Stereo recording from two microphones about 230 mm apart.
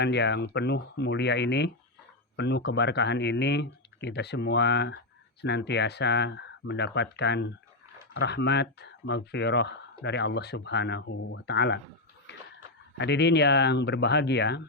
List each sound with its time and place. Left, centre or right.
0.0 s speech: left
13.0 s speech: left